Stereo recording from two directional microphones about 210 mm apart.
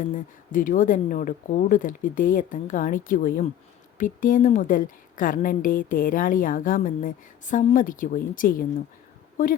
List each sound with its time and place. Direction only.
0.0 s a woman's voice: 40° left (ahead or behind)